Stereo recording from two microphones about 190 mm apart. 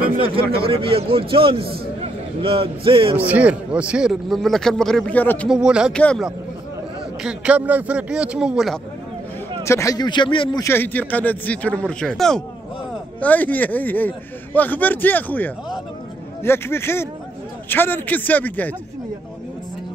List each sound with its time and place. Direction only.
0.7 s a man's voice: 30° right (ahead or behind)
3.2 s a man's voice: 10° right (ahead or behind); by 5.5 s 10° left (ahead or behind)
5.5 s a man's voice: 5° right (ahead or behind)
7.2 s a man's voice: 5° right (ahead or behind)
9.7 s speech: 15° left (ahead or behind)
10.6 s speech: 10° left (ahead or behind)